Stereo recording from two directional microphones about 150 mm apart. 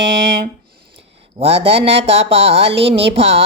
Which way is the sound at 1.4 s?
40° right (ahead or behind).